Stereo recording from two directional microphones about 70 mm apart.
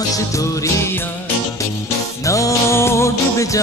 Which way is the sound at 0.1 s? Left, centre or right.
Left.